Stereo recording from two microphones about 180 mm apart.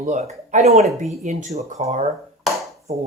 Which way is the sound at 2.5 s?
Centre (ahead or behind).